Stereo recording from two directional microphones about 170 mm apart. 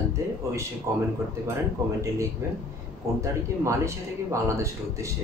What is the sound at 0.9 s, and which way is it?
Speech, 15° right (ahead or behind).